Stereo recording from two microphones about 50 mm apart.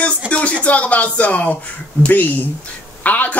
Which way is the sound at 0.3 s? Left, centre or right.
Left.